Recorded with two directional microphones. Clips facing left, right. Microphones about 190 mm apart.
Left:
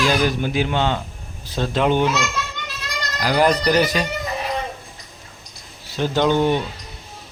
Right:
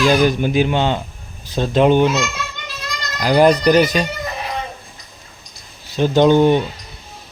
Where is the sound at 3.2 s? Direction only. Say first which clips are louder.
Right 5 dB; 20° right (ahead or behind).